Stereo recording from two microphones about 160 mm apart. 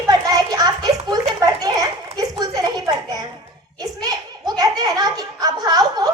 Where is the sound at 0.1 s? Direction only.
25° right (ahead or behind).